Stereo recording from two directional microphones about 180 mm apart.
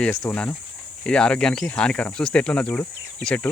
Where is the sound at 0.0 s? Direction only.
5° left (ahead or behind).